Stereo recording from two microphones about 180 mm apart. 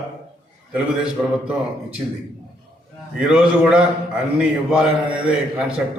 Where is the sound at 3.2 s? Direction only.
5° right (ahead or behind).